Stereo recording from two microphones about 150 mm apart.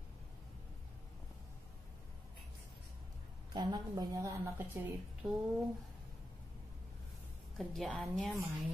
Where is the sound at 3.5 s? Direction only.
30° right (ahead or behind).